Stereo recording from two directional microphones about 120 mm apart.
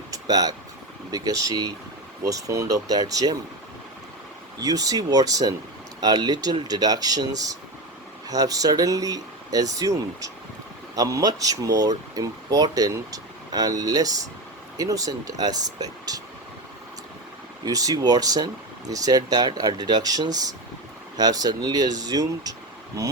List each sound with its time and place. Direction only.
0.1 s speech: 30° right (ahead or behind)
4.6 s speech: 30° right (ahead or behind)
17.7 s speech: 30° right (ahead or behind)